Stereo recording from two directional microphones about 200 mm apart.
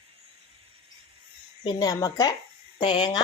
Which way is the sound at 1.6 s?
20° left (ahead or behind).